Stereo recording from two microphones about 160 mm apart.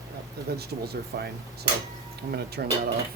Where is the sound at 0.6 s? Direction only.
85° right.